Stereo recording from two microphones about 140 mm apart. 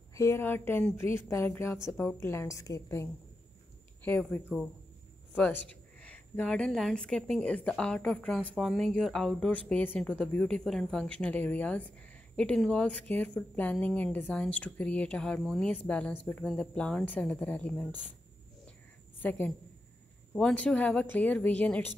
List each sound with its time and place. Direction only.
0.1 s a woman's voice: 20° left (ahead or behind)
4.5 s speech: 5° right (ahead or behind)
5.3 s speech: 15° left (ahead or behind)
19.2 s speech: 10° left (ahead or behind)